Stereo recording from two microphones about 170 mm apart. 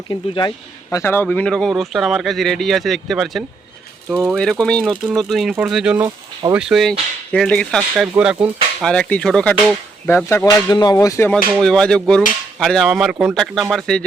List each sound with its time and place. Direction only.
0.1 s a man's voice: 25° left (ahead or behind)
0.9 s speech: 15° left (ahead or behind)
4.1 s mechanisms: 15° right (ahead or behind)
4.6 s speech: 5° left (ahead or behind)
11.5 s speech: centre (ahead or behind)